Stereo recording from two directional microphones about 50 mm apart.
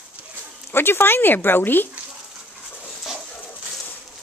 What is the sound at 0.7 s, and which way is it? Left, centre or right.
Speech, left.